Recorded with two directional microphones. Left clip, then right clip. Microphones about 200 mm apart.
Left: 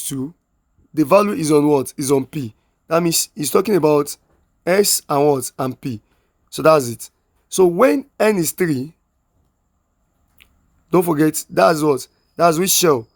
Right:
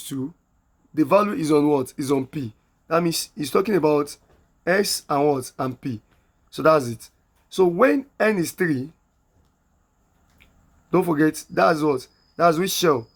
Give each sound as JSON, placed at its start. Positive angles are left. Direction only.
{"t": 0.0, "sound": "speech", "side_deg": 45}
{"t": 10.3, "sound": "speech", "side_deg": 50}